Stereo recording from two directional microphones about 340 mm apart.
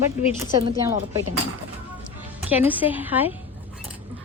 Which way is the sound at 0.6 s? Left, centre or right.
Centre.